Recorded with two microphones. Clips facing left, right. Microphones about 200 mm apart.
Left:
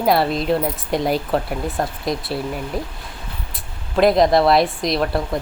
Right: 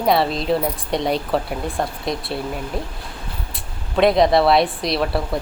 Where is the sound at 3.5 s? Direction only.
Centre (ahead or behind).